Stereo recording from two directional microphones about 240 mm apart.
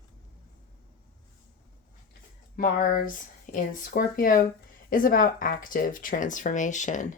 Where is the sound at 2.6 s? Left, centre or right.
Left.